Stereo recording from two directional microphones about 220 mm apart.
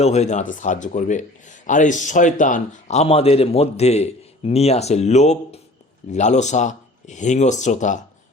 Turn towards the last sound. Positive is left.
turn(degrees=35)  # may be behind; listen again after turning